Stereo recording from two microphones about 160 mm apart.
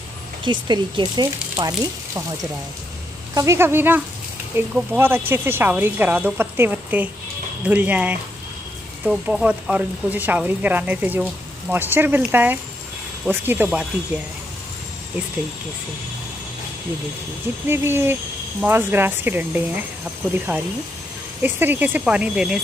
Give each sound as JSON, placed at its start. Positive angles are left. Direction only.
{"t": 0.4, "sound": "speech", "side_deg": -30}
{"t": 3.3, "sound": "speech", "side_deg": -15}
{"t": 17.6, "sound": "speech", "side_deg": -15}